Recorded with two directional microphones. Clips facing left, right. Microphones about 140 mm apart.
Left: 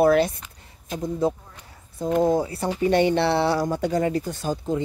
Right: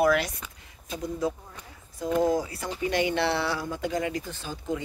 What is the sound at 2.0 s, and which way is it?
Speech, 25° left (ahead or behind).